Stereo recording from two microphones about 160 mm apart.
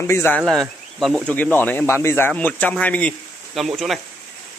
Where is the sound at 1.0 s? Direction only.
Centre (ahead or behind).